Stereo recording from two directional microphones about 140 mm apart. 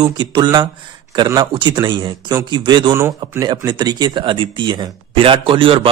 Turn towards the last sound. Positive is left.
turn(degrees=-40)  # may be behind; listen again after turning